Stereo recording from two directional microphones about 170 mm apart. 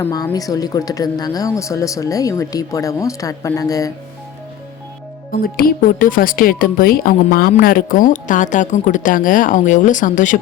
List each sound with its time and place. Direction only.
0.0 s speech: 20° left (ahead or behind)
5.3 s a woman's voice: 60° left (ahead or behind)